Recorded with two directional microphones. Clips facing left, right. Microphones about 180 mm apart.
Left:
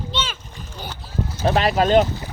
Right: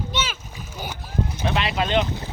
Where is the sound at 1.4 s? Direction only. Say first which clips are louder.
Left 8 dB; 40° left (ahead or behind).